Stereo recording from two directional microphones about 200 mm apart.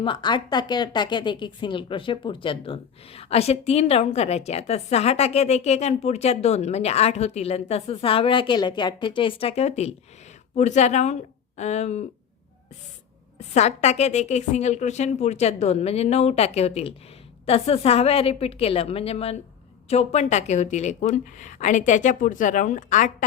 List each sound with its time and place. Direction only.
0.0 s speech: 25° left (ahead or behind)
13.5 s a woman's voice: 35° left (ahead or behind)